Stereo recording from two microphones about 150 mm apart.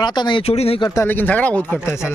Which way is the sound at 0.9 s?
15° left (ahead or behind).